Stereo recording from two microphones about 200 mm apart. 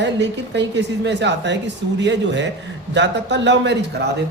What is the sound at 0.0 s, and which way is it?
Speech, 60° right (ahead or behind).